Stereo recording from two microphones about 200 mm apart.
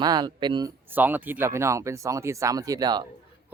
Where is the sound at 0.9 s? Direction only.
10° right (ahead or behind).